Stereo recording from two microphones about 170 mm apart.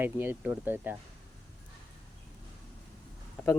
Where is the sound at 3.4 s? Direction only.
5° left (ahead or behind).